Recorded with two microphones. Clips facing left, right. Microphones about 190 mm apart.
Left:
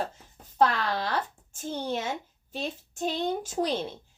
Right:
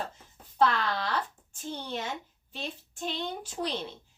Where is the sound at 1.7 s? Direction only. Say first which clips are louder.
Left 5 dB; 45° left (ahead or behind).